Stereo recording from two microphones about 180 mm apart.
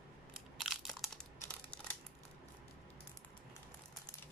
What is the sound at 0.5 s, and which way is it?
Crushing, centre (ahead or behind).